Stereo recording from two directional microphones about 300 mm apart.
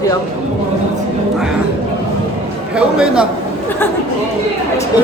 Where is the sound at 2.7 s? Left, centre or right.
Centre.